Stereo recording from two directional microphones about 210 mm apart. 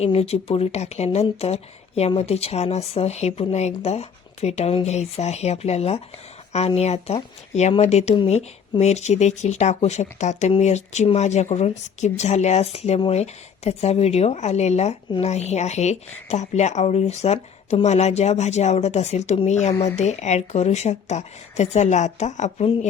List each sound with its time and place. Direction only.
0.0 s speech: 30° left (ahead or behind)